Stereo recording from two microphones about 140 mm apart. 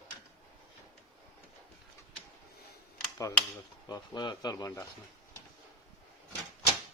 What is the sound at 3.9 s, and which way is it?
Speech, 30° left (ahead or behind).